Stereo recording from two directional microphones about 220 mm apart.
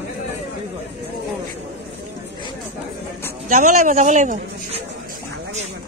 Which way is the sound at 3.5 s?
35° right (ahead or behind).